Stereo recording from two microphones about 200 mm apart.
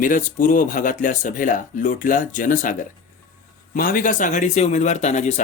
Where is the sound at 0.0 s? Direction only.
40° left (ahead or behind).